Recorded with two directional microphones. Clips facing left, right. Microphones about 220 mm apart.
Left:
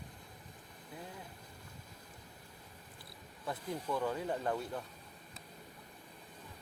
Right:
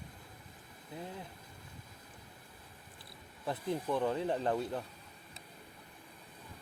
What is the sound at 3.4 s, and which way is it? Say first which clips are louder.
Speech: right 4 dB; 25° right (ahead or behind).